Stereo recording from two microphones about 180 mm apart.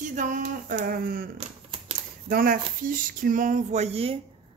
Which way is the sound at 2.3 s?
50° right (ahead or behind).